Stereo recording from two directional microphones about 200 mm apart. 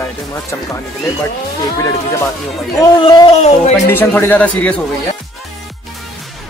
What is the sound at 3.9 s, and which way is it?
Speech, 10° left (ahead or behind).